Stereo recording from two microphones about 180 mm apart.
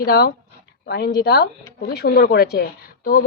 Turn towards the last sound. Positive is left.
turn(degrees=55)  # may be behind; listen again after turning